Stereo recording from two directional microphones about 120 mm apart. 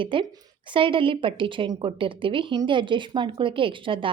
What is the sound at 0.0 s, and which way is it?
A woman's voice, 45° right (ahead or behind).